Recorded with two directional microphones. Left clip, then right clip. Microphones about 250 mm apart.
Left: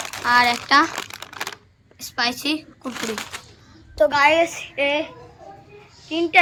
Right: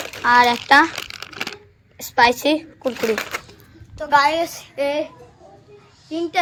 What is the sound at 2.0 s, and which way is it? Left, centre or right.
Speech, centre.